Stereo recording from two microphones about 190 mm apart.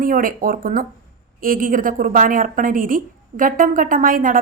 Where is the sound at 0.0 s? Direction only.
50° right (ahead or behind).